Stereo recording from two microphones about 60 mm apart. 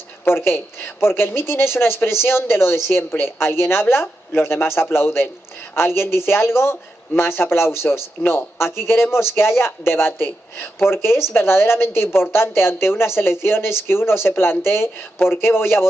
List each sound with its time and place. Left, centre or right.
0.2 s a woman's voice: left